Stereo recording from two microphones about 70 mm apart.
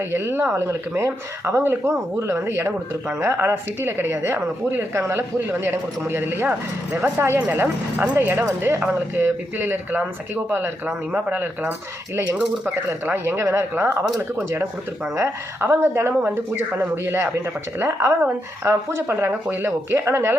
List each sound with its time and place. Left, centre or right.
0.1 s speech: right
8.4 s speech: right
8.8 s speech: right
12.1 s speech: right
17.0 s speech: right